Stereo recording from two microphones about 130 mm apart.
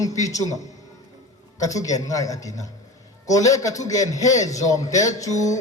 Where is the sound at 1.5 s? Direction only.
25° left (ahead or behind).